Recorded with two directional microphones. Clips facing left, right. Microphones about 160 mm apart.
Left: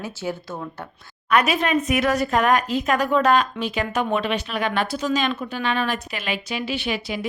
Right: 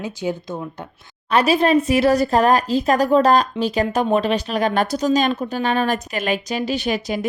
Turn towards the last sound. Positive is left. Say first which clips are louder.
# right 4 dB
turn(degrees=-40)  # may be behind; listen again after turning